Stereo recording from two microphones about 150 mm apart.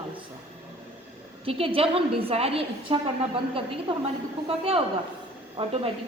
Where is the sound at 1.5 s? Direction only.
40° right (ahead or behind).